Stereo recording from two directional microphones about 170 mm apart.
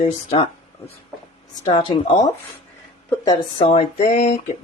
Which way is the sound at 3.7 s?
45° left (ahead or behind).